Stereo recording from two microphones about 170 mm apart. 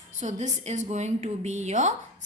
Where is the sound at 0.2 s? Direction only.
45° right (ahead or behind).